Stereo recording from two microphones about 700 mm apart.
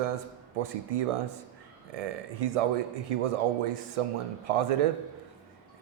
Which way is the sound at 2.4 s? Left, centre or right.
Right.